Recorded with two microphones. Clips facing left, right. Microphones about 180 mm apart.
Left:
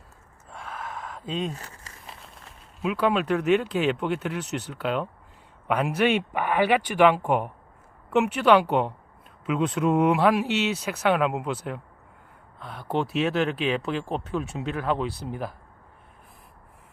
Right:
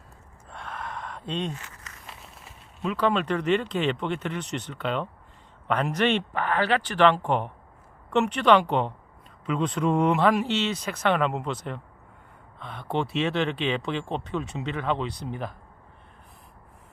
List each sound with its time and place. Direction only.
0.4 s gasp: centre (ahead or behind)
1.5 s a sound: 35° left (ahead or behind)
2.0 s speech: centre (ahead or behind)